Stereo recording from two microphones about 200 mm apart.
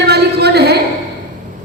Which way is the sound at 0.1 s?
55° right (ahead or behind).